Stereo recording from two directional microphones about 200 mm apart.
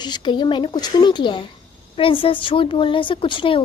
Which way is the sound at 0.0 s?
20° left (ahead or behind).